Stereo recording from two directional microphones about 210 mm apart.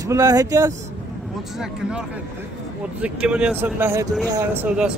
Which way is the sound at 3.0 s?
5° right (ahead or behind).